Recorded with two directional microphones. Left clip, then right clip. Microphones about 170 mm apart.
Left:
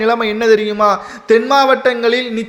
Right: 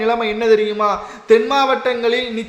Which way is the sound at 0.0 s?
30° left (ahead or behind).